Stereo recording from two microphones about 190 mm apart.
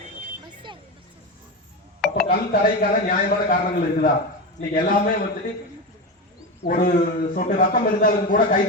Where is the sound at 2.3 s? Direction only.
50° left (ahead or behind).